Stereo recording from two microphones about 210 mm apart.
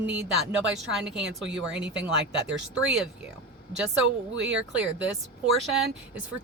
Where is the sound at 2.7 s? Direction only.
5° right (ahead or behind).